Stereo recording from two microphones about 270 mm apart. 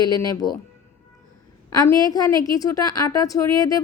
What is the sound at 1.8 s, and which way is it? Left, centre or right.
A woman's voice, centre.